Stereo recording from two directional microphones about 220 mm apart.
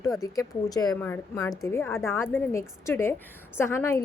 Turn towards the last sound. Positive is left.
turn(degrees=10)  # may be behind; listen again after turning